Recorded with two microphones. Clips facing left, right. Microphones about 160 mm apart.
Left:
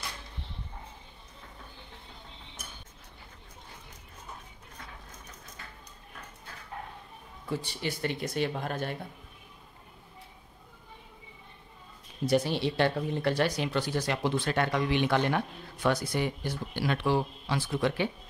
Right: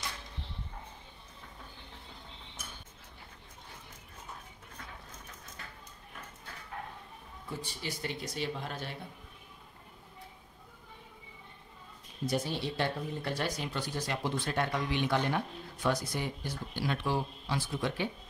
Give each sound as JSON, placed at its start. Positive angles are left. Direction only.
{"t": 7.4, "sound": "speech", "side_deg": 70}
{"t": 12.3, "sound": "speech", "side_deg": 75}